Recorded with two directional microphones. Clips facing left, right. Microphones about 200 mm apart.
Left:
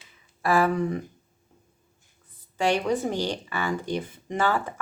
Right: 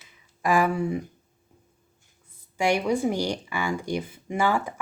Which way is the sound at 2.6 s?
10° right (ahead or behind).